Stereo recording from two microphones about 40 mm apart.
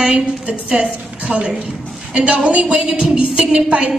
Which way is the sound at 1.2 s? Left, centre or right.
Right.